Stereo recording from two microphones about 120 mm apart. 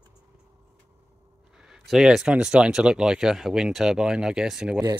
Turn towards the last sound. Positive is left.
turn(degrees=-5)  # may be behind; listen again after turning